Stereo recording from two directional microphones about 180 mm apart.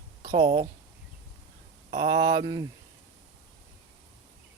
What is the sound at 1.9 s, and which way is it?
Speech, 25° right (ahead or behind).